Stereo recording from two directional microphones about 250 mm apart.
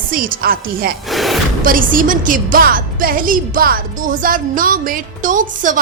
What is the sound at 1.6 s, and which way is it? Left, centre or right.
A woman's voice, right.